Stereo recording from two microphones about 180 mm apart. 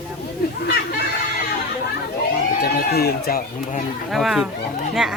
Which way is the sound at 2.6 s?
60° left (ahead or behind).